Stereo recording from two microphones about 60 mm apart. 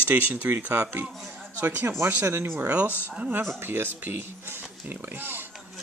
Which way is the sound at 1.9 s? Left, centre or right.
Right.